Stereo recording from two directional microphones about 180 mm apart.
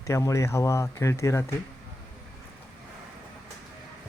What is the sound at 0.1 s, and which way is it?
Speech, 15° left (ahead or behind).